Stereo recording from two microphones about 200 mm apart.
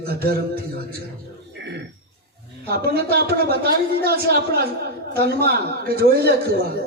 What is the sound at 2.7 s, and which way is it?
Speech, 50° right (ahead or behind).